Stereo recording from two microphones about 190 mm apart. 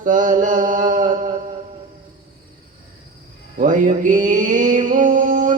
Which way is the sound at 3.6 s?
45° right (ahead or behind).